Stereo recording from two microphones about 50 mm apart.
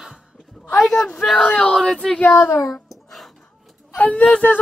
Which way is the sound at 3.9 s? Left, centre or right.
Left.